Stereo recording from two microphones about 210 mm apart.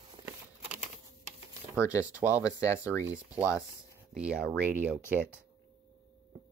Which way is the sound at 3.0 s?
5° right (ahead or behind).